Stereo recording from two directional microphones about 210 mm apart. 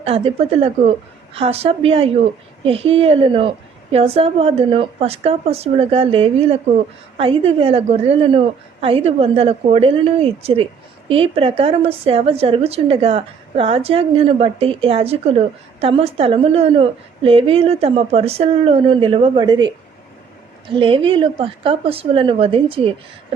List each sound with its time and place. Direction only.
0.0 s a woman's voice: 30° right (ahead or behind)